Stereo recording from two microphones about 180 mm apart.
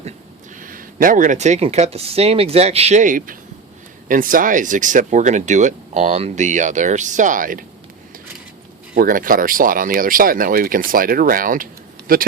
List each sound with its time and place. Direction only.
0.6 s speech: 50° right (ahead or behind)
9.0 s speech: 50° right (ahead or behind)